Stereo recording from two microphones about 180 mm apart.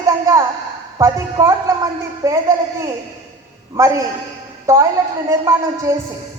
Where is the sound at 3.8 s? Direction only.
15° right (ahead or behind).